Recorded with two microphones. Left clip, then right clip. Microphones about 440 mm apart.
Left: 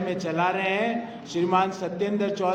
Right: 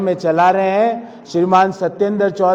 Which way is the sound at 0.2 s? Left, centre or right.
Right.